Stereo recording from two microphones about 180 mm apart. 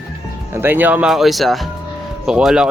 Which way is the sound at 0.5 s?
10° right (ahead or behind).